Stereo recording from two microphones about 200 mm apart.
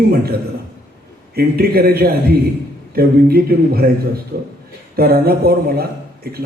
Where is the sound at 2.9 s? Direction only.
50° right (ahead or behind).